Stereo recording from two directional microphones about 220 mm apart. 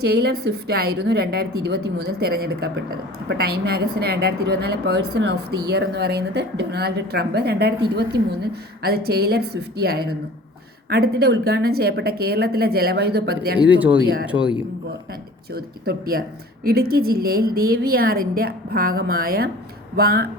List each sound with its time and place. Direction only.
0.0 s a woman's voice: 45° right (ahead or behind)
13.7 s a man's voice: 5° right (ahead or behind)
15.5 s a woman's voice: 45° right (ahead or behind)